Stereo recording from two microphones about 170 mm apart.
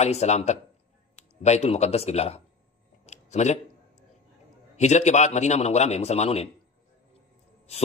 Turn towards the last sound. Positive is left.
turn(degrees=40)  # may be behind; listen again after turning